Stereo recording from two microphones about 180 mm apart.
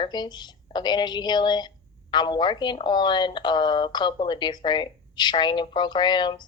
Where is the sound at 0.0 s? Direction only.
25° left (ahead or behind).